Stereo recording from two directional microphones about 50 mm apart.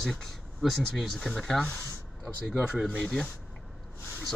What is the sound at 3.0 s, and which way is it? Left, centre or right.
Speech, centre.